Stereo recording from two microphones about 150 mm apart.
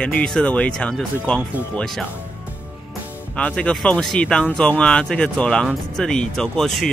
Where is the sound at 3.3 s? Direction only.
5° left (ahead or behind).